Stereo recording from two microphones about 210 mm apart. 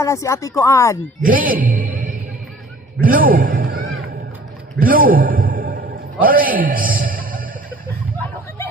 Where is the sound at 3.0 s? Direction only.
40° right (ahead or behind).